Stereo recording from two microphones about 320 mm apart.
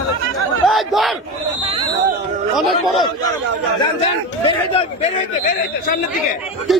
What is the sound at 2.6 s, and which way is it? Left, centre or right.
Speech, centre.